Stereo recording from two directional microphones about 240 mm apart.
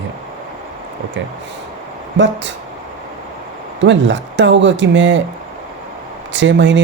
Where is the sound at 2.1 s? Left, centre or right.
Right.